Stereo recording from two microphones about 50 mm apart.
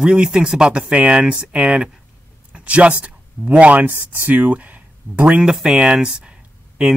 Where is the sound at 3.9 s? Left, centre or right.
Right.